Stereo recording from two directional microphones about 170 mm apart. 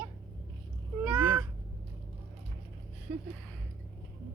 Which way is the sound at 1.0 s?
10° right (ahead or behind).